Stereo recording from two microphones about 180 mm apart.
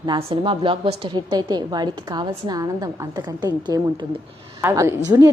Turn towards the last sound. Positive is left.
turn(degrees=-15)  # may be behind; listen again after turning